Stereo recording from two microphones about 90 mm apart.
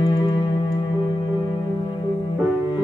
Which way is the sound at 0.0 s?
55° left (ahead or behind).